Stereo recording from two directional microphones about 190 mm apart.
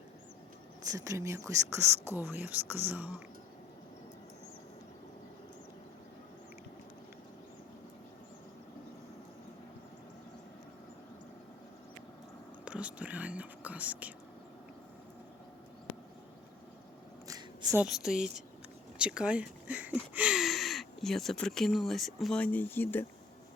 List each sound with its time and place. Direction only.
0.8 s speech: 15° right (ahead or behind)
12.6 s speech: 5° right (ahead or behind)
17.2 s a sound: 20° right (ahead or behind)
17.7 s speech: centre (ahead or behind)